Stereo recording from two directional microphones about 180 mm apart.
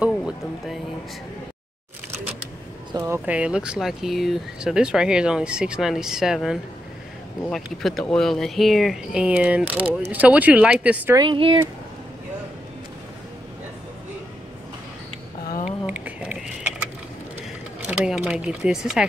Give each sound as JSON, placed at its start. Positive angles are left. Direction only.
{"t": 0.1, "sound": "music", "side_deg": 0}
{"t": 2.9, "sound": "speech", "side_deg": -15}
{"t": 11.1, "sound": "speech", "side_deg": -25}
{"t": 15.9, "sound": "a sound", "side_deg": -10}
{"t": 17.8, "sound": "speech", "side_deg": -5}